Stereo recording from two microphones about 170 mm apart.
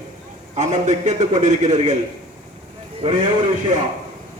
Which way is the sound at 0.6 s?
45° right (ahead or behind).